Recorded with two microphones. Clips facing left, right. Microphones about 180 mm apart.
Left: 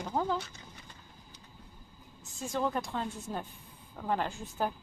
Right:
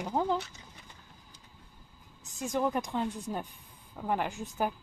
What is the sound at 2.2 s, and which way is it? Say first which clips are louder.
Speech: right 2 dB; 20° right (ahead or behind).